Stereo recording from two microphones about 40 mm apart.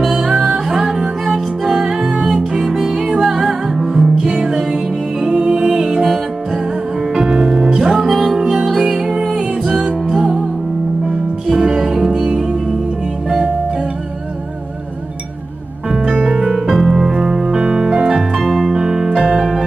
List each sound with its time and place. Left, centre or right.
0.0 s music: centre
5.3 s music: right
7.7 s music: centre
11.1 s music: centre
16.3 s music: centre
18.4 s piano: centre
18.7 s music: centre